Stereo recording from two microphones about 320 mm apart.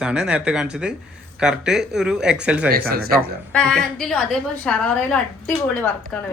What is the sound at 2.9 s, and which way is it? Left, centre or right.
Speech, right.